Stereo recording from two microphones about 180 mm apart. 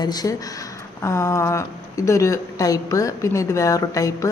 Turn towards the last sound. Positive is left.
turn(degrees=20)  # may be behind; listen again after turning